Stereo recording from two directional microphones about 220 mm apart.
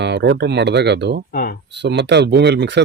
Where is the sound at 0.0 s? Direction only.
50° right (ahead or behind).